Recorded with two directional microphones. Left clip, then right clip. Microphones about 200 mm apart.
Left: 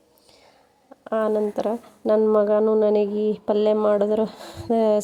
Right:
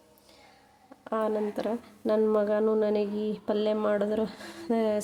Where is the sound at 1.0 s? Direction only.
25° left (ahead or behind).